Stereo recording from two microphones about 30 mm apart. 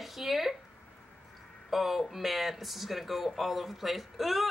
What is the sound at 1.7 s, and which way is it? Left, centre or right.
Speech, centre.